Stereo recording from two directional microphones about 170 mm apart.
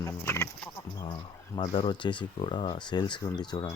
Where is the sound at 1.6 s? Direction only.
30° left (ahead or behind).